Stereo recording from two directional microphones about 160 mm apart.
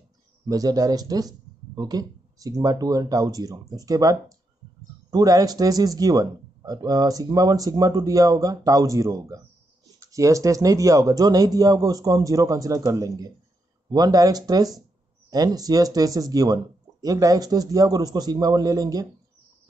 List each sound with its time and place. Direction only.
0.5 s speech: 25° right (ahead or behind)